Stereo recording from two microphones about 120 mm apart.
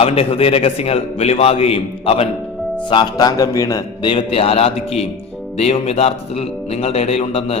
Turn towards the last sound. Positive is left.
turn(degrees=60)  # may be behind; listen again after turning